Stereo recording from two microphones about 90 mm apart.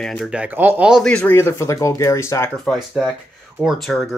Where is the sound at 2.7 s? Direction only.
5° right (ahead or behind).